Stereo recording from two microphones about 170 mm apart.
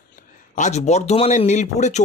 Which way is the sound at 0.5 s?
45° left (ahead or behind).